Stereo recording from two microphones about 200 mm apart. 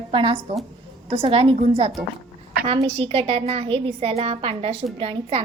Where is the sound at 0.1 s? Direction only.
25° right (ahead or behind).